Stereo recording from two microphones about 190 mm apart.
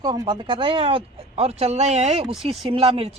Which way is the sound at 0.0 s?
20° right (ahead or behind).